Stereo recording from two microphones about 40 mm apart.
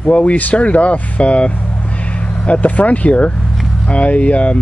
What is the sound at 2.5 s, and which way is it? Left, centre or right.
Speech, left.